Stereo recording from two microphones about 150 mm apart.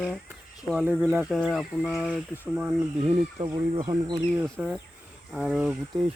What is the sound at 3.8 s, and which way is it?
Speech, 25° right (ahead or behind).